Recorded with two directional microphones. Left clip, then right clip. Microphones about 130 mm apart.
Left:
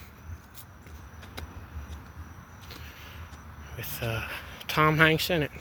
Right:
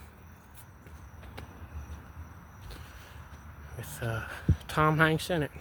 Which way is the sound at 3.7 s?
20° right (ahead or behind).